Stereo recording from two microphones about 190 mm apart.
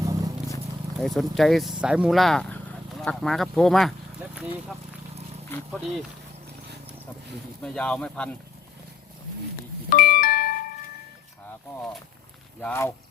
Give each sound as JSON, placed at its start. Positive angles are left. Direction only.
{"t": 0.0, "sound": "a sound", "side_deg": -20}
{"t": 0.9, "sound": "speech", "side_deg": 0}
{"t": 7.6, "sound": "speech", "side_deg": 5}
{"t": 9.9, "sound": "music", "side_deg": 50}
{"t": 12.5, "sound": "speech", "side_deg": 10}